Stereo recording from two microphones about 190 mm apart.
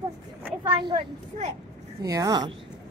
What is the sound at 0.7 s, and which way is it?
Speech, 25° right (ahead or behind).